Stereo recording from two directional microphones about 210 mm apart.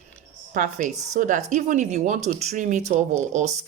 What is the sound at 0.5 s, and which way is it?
Speech, 40° right (ahead or behind).